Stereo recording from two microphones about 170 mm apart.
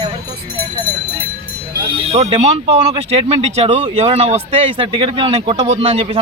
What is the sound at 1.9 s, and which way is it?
Speech, 35° right (ahead or behind).